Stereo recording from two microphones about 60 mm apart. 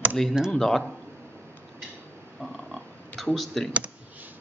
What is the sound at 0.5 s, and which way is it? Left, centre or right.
Speech, centre.